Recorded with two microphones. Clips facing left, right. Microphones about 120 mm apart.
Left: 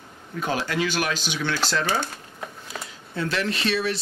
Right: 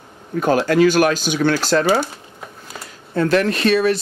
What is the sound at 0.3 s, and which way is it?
Speech, 50° right (ahead or behind).